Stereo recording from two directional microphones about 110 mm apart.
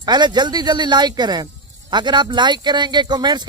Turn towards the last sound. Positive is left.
turn(degrees=-40)  # may be behind; listen again after turning